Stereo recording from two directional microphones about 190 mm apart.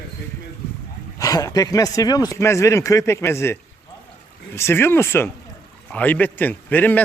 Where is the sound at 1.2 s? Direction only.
20° left (ahead or behind).